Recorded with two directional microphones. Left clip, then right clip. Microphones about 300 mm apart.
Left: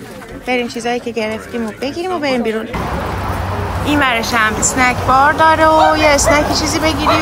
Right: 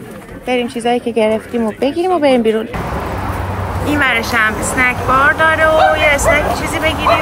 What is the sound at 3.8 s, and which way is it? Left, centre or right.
Speech, centre.